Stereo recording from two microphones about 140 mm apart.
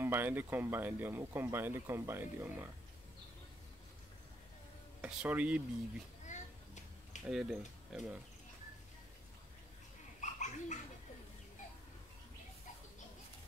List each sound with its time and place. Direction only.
0.0 s speech: 15° right (ahead or behind)
5.0 s speech: 10° right (ahead or behind)
6.2 s a sound: 60° left (ahead or behind)
7.2 s speech: 5° right (ahead or behind)
10.2 s bird: 60° left (ahead or behind)